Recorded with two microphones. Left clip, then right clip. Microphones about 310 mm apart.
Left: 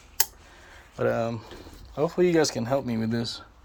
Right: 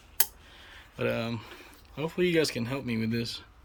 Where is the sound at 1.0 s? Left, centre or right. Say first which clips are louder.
Left 5 dB; centre.